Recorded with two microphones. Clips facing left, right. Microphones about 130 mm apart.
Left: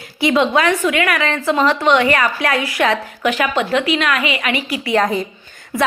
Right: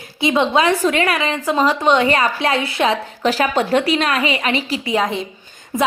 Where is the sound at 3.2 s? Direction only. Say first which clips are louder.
Right 1 dB; 35° right (ahead or behind).